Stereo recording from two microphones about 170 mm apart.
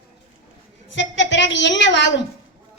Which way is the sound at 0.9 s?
90° left.